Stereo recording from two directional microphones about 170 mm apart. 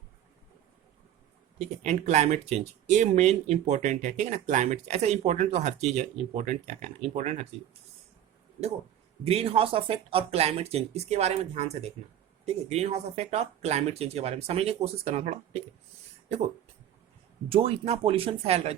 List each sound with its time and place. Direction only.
1.5 s speech: 45° right (ahead or behind)
9.2 s speech: 35° right (ahead or behind)
17.5 s speech: 35° right (ahead or behind)